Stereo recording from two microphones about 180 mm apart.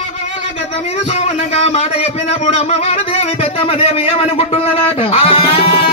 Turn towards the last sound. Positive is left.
turn(degrees=35)  # may be behind; listen again after turning